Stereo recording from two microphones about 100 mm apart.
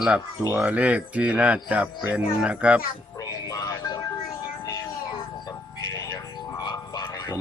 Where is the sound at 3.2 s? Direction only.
40° left (ahead or behind).